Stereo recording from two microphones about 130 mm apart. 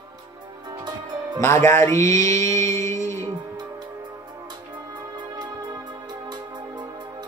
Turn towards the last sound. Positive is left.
turn(degrees=-35)  # may be behind; listen again after turning